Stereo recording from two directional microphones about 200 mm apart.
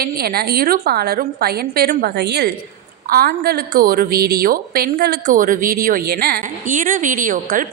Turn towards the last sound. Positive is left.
turn(degrees=-45)  # may be behind; listen again after turning